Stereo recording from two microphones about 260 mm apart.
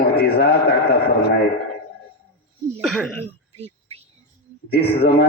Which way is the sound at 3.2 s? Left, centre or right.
Right.